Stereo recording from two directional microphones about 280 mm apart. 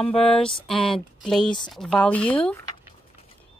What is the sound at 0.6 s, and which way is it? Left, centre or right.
Speech, centre.